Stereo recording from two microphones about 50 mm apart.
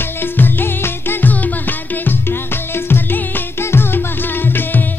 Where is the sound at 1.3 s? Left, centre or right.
Left.